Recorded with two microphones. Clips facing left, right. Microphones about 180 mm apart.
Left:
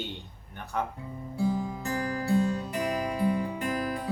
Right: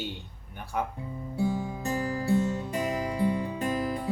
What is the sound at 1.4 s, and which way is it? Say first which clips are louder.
Music: even; 25° right (ahead or behind).